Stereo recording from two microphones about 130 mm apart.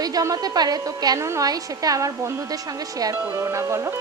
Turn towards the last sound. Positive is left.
turn(degrees=-25)  # may be behind; listen again after turning